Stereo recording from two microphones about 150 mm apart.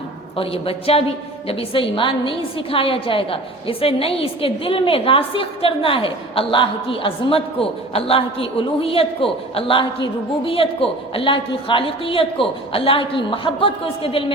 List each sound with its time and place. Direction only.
0.3 s a woman's voice: 40° left (ahead or behind)